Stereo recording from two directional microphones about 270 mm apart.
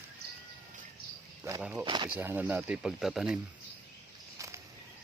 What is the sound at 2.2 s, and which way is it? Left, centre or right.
Speech, centre.